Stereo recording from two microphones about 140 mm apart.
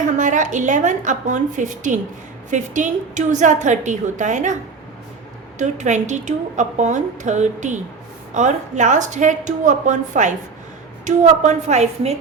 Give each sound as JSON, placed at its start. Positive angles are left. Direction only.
{"t": 0.0, "sound": "a woman's voice", "side_deg": -65}
{"t": 5.5, "sound": "a woman's voice", "side_deg": -60}